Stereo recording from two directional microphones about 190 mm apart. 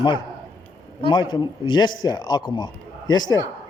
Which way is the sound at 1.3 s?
25° left (ahead or behind).